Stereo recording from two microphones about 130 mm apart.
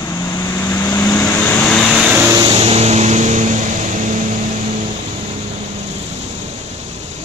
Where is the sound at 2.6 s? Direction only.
55° right (ahead or behind); by 4.1 s 75° right (ahead or behind).